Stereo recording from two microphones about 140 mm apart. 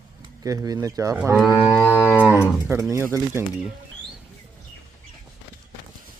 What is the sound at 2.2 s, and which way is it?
Speech, 10° right (ahead or behind).